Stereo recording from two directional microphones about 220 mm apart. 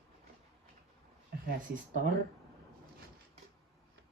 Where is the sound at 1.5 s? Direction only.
40° right (ahead or behind).